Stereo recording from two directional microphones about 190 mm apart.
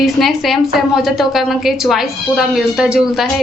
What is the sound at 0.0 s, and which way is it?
A woman's voice, centre (ahead or behind).